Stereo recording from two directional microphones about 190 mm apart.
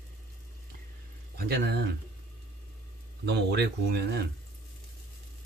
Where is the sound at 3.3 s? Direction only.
60° right (ahead or behind).